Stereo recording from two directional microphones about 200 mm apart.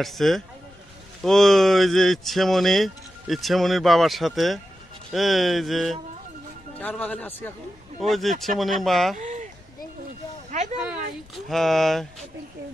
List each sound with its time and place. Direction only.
0.0 s a man's voice: centre (ahead or behind)
9.2 s a sound: 35° right (ahead or behind)
10.8 s speech: centre (ahead or behind)